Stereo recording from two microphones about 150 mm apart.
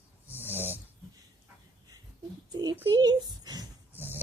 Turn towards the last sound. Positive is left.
turn(degrees=-15)  # may be behind; listen again after turning